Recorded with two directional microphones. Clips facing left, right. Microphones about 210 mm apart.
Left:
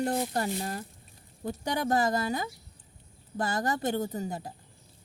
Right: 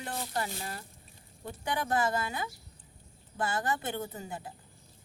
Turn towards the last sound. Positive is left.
turn(degrees=40)  # may be behind; listen again after turning